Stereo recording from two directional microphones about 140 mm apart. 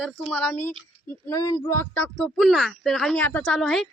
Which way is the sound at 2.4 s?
Centre (ahead or behind).